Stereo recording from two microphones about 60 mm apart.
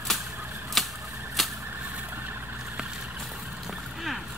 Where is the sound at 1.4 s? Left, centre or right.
Centre.